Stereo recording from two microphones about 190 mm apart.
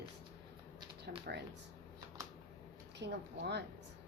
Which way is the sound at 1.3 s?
55° right (ahead or behind).